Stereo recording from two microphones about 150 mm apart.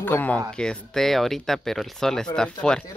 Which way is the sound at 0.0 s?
10° left (ahead or behind).